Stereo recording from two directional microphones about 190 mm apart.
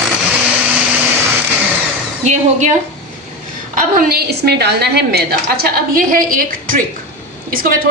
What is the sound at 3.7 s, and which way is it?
A woman's voice, 50° right (ahead or behind).